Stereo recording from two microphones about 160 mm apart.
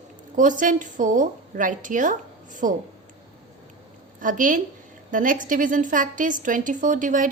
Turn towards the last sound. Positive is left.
turn(degrees=-55)  # may be behind; listen again after turning